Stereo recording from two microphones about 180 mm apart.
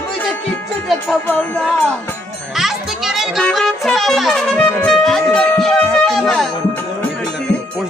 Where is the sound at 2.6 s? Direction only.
Centre (ahead or behind).